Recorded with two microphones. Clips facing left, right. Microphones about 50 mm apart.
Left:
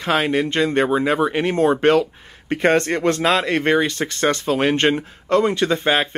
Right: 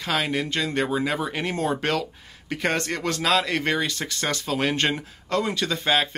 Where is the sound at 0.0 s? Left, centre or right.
Left.